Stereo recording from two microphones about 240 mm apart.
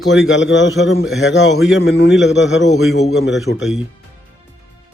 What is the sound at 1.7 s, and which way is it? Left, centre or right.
Speech, left.